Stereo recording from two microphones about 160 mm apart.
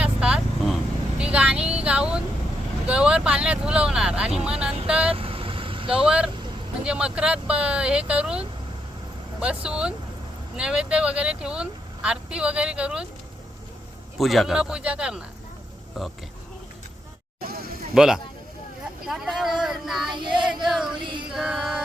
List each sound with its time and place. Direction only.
0.0 s vehicle: 5° right (ahead or behind)
2.8 s a man's voice: 5° right (ahead or behind)
5.1 s vehicle: 35° right (ahead or behind)
5.9 s a man's voice: 5° right (ahead or behind)
14.2 s a man's voice: centre (ahead or behind)
17.4 s a sound: 70° right (ahead or behind)
17.9 s a man's voice: 5° right (ahead or behind)
20.7 s music: centre (ahead or behind)
20.9 s female singing: 30° right (ahead or behind)
21.2 s female singing: 5° right (ahead or behind)